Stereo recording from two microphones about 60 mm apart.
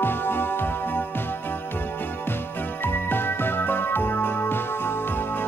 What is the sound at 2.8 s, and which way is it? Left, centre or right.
Music, left.